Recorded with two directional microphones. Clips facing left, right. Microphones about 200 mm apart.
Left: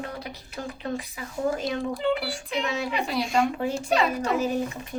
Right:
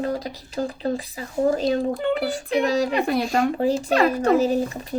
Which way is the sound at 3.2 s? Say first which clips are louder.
Right 4 dB; 40° right (ahead or behind).